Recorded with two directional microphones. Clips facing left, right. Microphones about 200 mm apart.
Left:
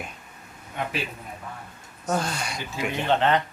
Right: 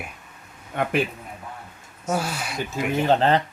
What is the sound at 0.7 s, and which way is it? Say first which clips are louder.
Speech: right 5 dB; 55° right (ahead or behind).